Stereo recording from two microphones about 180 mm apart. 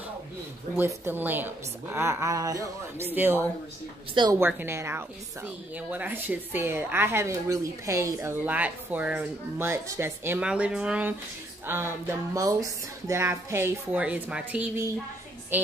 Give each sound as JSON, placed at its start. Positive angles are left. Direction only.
{"t": 0.7, "sound": "speech", "side_deg": -10}
{"t": 4.1, "sound": "a woman's voice", "side_deg": -25}
{"t": 4.4, "sound": "speech", "side_deg": -10}